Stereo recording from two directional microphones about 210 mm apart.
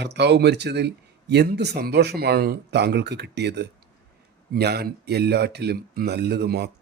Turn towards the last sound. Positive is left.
turn(degrees=-50)  # may be behind; listen again after turning